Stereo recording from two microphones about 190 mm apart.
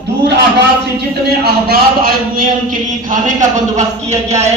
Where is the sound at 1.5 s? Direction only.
55° right (ahead or behind).